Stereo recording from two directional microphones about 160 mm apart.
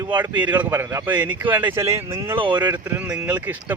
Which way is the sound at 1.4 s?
10° right (ahead or behind).